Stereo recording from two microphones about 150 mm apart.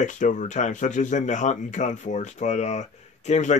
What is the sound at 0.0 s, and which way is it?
Speech, 55° left (ahead or behind).